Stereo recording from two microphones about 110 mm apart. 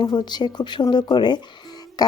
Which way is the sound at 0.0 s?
40° left (ahead or behind).